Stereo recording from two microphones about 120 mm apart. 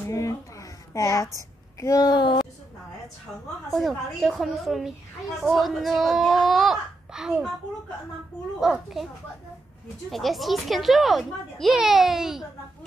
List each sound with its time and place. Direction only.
0.1 s a woman's voice: 25° left (ahead or behind)
3.7 s a child's voice: centre (ahead or behind)
8.5 s a child's voice: 5° right (ahead or behind)
10.1 s a child's voice: centre (ahead or behind)